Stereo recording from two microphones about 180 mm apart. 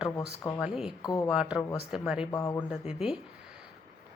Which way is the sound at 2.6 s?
5° right (ahead or behind).